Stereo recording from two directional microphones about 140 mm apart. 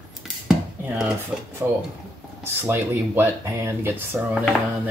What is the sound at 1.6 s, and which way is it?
Speech, 10° right (ahead or behind).